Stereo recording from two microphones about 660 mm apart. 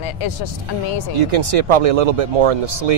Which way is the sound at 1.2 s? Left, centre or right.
Right.